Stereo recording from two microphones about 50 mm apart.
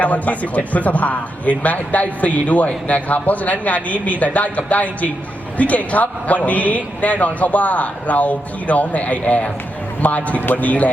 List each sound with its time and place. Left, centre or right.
0.0 s a man's voice: left